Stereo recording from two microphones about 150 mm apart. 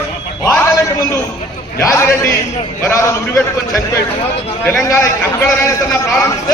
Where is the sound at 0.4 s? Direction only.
20° left (ahead or behind).